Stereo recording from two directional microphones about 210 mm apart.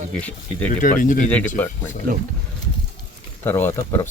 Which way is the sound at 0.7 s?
40° left (ahead or behind).